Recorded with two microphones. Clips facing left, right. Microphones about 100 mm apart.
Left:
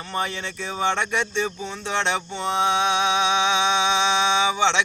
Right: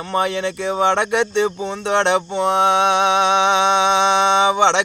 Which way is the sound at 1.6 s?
65° right (ahead or behind).